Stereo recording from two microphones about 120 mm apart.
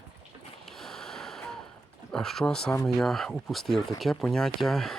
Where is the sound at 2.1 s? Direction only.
5° left (ahead or behind).